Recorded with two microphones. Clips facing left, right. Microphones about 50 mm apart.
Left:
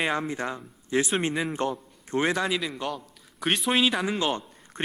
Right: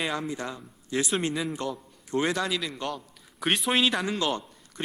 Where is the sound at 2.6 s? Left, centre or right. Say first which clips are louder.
Left 1 dB; centre.